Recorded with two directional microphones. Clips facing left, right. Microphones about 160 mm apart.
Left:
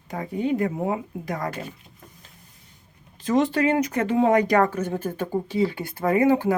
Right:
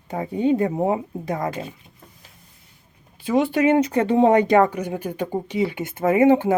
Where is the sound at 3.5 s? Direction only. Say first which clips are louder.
Right 4 dB; 20° right (ahead or behind).